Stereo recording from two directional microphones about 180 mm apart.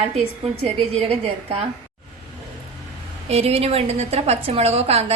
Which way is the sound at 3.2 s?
35° right (ahead or behind).